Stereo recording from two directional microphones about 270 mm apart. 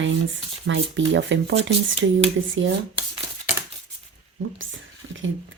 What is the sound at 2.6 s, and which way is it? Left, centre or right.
Speech, right.